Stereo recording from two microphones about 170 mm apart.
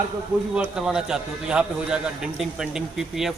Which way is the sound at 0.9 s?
5° right (ahead or behind).